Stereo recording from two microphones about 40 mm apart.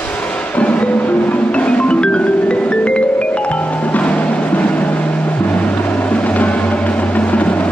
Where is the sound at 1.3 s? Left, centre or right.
Left.